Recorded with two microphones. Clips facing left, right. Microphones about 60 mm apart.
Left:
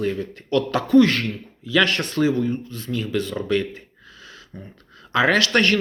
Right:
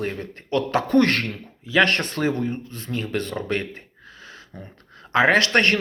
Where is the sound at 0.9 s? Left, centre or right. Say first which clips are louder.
Left 5 dB; right.